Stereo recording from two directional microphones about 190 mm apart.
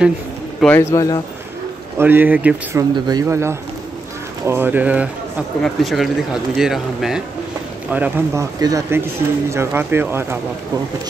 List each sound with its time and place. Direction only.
0.6 s speech: 10° left (ahead or behind)
2.0 s speech: 10° right (ahead or behind)